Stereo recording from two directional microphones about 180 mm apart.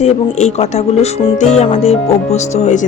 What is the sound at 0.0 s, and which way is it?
Speech, 40° left (ahead or behind).